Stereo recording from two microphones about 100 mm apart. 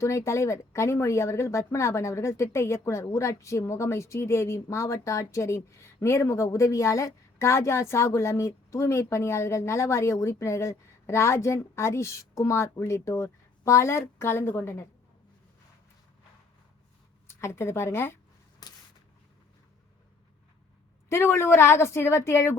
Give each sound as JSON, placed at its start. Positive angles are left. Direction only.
{"t": 0.0, "sound": "a woman's voice", "side_deg": 30}
{"t": 17.2, "sound": "a woman's voice", "side_deg": 25}
{"t": 18.6, "sound": "a sound", "side_deg": 40}
{"t": 21.1, "sound": "a woman's voice", "side_deg": 25}